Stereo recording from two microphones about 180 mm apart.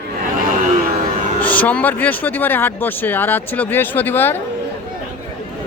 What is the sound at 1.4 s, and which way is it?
Speech, 10° left (ahead or behind).